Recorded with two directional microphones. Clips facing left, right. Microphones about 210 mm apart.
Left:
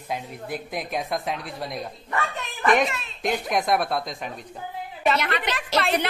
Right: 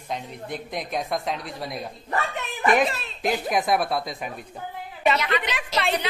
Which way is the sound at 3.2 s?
Centre (ahead or behind).